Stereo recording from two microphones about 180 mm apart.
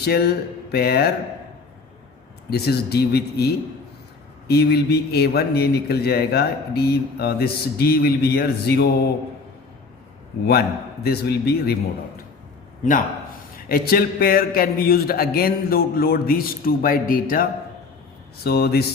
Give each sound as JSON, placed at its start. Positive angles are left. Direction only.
{"t": 0.0, "sound": "speech", "side_deg": 60}
{"t": 2.5, "sound": "a man's voice", "side_deg": 65}
{"t": 10.4, "sound": "a man's voice", "side_deg": 60}
{"t": 13.7, "sound": "a man's voice", "side_deg": 55}